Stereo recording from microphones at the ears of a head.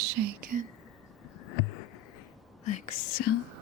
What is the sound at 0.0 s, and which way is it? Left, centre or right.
Speech, right.